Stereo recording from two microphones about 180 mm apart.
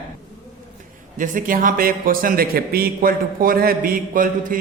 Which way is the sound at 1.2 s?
50° right (ahead or behind).